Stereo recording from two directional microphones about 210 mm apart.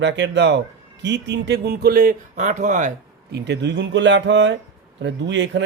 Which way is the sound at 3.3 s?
55° right (ahead or behind).